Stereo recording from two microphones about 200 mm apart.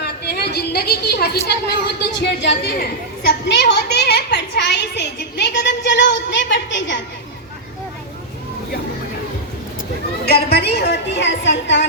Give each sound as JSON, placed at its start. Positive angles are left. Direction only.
{"t": 0.0, "sound": "a sound", "side_deg": 55}
{"t": 1.5, "sound": "a woman's voice", "side_deg": 55}
{"t": 10.2, "sound": "a woman's voice", "side_deg": 55}